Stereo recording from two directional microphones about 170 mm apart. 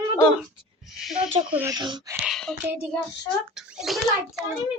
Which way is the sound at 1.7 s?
25° right (ahead or behind).